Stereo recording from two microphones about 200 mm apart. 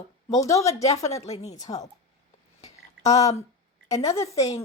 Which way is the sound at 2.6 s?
35° left (ahead or behind).